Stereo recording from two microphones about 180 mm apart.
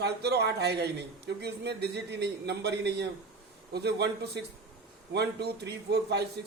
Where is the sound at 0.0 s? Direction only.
65° right (ahead or behind).